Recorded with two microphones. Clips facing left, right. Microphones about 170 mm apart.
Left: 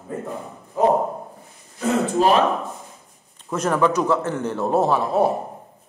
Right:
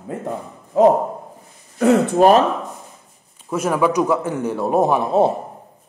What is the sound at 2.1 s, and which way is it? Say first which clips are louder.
Speech: right 3 dB; 60° right (ahead or behind).